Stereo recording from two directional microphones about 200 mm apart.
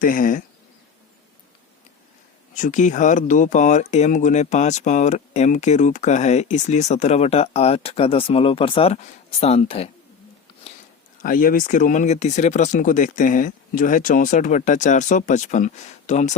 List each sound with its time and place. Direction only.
0.0 s speech: 45° left (ahead or behind)
2.6 s speech: 40° left (ahead or behind)
11.2 s speech: 45° left (ahead or behind)